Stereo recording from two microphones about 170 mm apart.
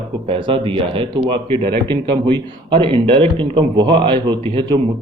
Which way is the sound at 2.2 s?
30° right (ahead or behind).